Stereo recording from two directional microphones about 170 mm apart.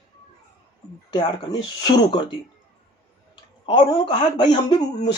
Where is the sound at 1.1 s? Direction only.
25° left (ahead or behind).